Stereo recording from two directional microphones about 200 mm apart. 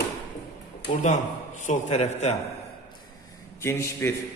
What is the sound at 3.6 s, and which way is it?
Speech, 15° left (ahead or behind).